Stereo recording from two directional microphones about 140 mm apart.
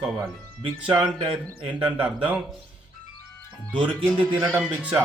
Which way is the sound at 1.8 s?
40° right (ahead or behind).